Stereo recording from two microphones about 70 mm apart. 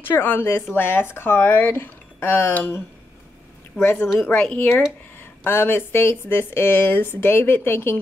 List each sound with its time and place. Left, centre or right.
0.0 s speech: left
3.8 s speech: left
5.4 s speech: left